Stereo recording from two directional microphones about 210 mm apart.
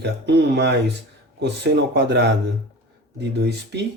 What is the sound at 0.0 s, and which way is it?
Speech, 55° right (ahead or behind).